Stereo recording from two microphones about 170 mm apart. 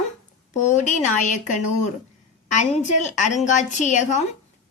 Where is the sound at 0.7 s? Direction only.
45° left (ahead or behind).